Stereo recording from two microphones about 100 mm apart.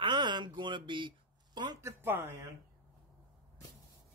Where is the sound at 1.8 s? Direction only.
25° right (ahead or behind).